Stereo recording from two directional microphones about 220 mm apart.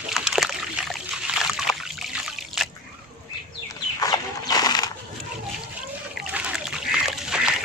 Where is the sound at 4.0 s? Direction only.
15° left (ahead or behind).